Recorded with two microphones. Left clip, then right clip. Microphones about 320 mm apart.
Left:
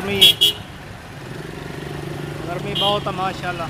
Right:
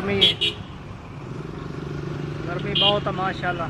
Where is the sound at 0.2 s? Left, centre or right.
Left.